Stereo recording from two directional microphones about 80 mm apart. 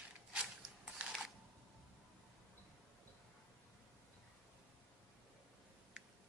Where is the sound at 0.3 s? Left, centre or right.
Centre.